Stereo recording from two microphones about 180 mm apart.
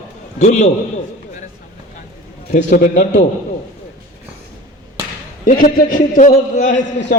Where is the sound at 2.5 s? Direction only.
45° left (ahead or behind).